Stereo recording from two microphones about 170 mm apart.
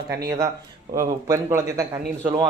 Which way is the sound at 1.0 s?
15° right (ahead or behind).